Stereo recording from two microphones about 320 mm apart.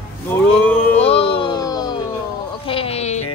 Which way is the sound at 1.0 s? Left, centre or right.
Centre.